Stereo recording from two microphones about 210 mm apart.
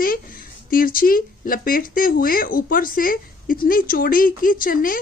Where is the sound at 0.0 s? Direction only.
45° left (ahead or behind).